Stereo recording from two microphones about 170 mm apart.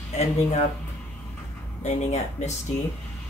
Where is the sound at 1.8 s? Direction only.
40° left (ahead or behind).